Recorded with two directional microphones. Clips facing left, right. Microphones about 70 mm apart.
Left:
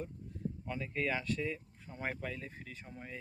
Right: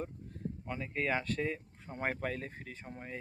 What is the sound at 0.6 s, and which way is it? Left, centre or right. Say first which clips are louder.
Speech: right 1 dB; right.